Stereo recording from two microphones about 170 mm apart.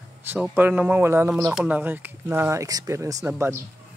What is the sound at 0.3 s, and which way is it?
Speech, 10° right (ahead or behind).